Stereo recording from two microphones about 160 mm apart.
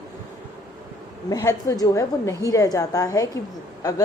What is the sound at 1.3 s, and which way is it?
A woman's voice, 20° left (ahead or behind).